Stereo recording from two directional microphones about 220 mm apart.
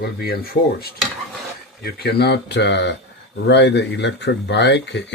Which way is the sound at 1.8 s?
45° left (ahead or behind).